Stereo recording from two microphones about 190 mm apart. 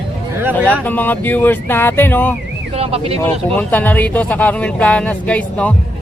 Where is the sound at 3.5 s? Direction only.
10° left (ahead or behind).